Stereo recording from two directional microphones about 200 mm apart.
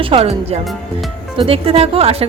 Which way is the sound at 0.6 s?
Centre (ahead or behind).